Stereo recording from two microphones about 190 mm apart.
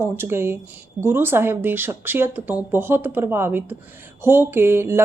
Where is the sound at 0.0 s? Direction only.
10° right (ahead or behind).